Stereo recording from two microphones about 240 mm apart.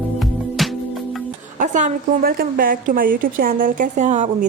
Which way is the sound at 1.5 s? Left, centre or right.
Right.